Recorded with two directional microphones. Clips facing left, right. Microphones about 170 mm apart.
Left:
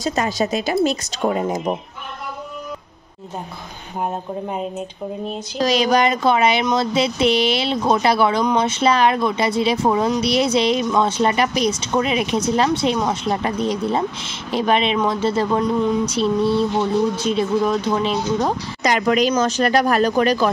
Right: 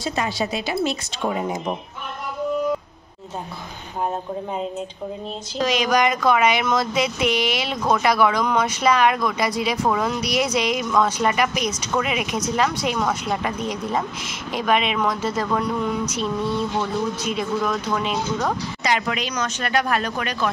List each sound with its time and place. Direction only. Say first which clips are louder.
0.0 s a woman's voice: left 4 dB; 45° left (ahead or behind)
5.6 s speech: left 3 dB; 35° left (ahead or behind)
18.8 s a woman's voice: left 10 dB; 45° left (ahead or behind)